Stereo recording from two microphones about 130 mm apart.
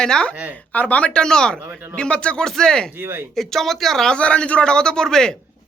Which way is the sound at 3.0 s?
15° right (ahead or behind).